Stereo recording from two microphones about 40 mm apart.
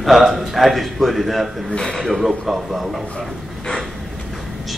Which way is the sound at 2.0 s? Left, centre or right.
Centre.